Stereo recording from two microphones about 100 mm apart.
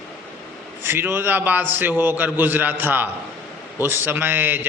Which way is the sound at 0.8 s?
25° right (ahead or behind).